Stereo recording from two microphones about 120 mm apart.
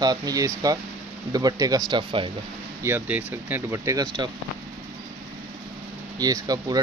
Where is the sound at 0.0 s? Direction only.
35° right (ahead or behind).